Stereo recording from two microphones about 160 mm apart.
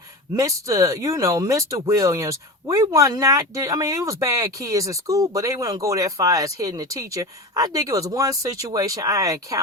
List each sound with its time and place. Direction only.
0.3 s speech: 20° right (ahead or behind)